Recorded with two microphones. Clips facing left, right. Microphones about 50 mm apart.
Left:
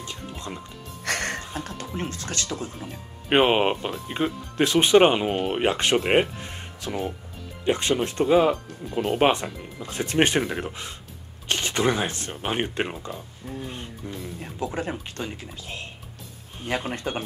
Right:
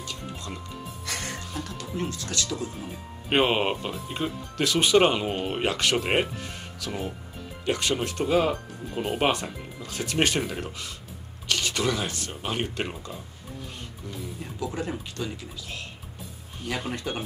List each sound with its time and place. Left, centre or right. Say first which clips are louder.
0.0 s music: left 1 dB; left
1.0 s music: left 8 dB; left
1.4 s speech: left 2 dB; left
3.3 s speech: left 4 dB; centre
5.3 s speech: left 4 dB; centre
5.7 s speech: left 3 dB; left
8.8 s speech: left 4 dB; centre
9.2 s speech: left 4 dB; left